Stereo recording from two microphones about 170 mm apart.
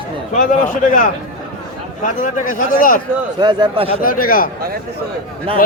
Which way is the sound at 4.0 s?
55° left (ahead or behind).